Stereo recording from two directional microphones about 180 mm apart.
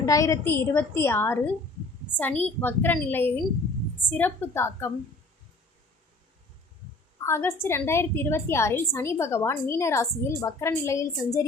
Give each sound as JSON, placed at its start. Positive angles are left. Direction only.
{"t": 0.0, "sound": "a woman's voice", "side_deg": 15}
{"t": 7.3, "sound": "a woman's voice", "side_deg": 15}